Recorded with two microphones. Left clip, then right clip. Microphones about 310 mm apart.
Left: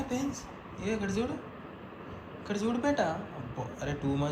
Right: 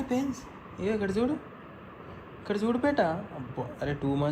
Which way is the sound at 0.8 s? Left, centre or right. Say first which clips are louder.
Right 4 dB; right.